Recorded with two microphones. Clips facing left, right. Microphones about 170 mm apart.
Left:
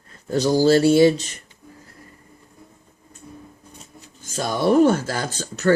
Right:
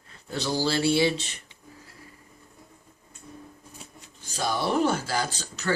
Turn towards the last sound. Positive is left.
turn(degrees=45)  # may be behind; listen again after turning